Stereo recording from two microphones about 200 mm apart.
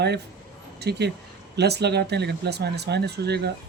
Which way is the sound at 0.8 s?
55° right (ahead or behind).